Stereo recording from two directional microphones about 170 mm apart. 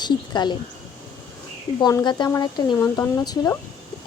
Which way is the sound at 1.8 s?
20° left (ahead or behind).